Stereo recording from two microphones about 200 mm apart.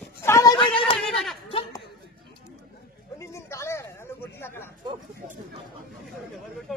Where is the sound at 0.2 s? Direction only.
15° left (ahead or behind).